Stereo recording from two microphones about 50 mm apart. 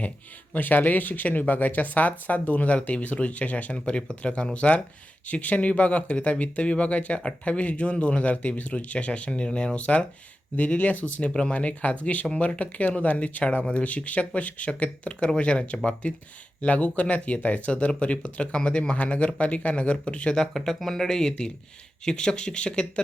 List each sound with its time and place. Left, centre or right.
0.5 s speech: left; by 23.0 s centre